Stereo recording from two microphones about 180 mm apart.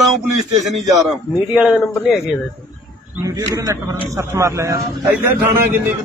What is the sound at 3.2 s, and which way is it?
A man's voice, 20° right (ahead or behind).